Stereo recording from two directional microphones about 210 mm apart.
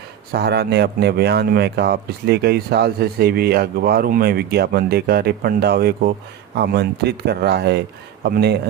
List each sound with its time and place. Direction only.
0.3 s speech: 50° right (ahead or behind)